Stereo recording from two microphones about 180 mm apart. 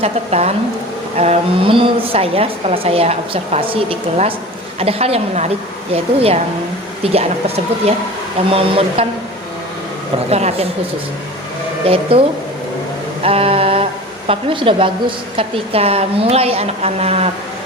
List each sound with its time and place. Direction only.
0.0 s a woman's voice: 35° right (ahead or behind)
10.2 s a woman's voice: 35° right (ahead or behind)
11.9 s a woman's voice: 30° right (ahead or behind)
13.2 s a sound: 30° right (ahead or behind)
14.3 s a woman's voice: 30° right (ahead or behind)